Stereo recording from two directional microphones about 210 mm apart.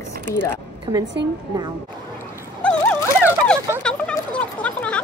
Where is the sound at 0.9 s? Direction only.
15° right (ahead or behind).